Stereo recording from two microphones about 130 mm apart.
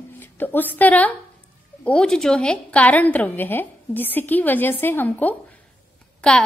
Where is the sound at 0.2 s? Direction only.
15° left (ahead or behind).